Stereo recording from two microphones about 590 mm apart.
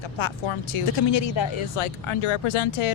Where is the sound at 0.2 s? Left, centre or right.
Left.